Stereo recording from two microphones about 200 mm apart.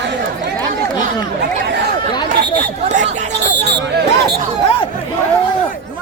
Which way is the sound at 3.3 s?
60° right (ahead or behind).